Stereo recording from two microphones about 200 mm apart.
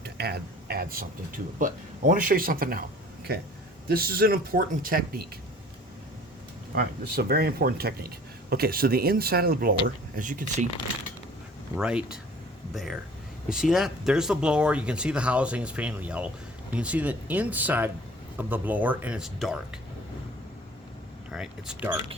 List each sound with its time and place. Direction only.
0.0 s speech: 55° right (ahead or behind)
3.8 s speech: 50° right (ahead or behind)
6.7 s speech: 50° right (ahead or behind)
11.8 s speech: 5° right (ahead or behind)
21.2 s speech: 5° right (ahead or behind)